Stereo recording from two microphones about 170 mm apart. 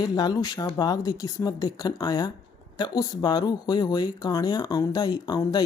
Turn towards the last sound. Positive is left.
turn(degrees=25)  # may be behind; listen again after turning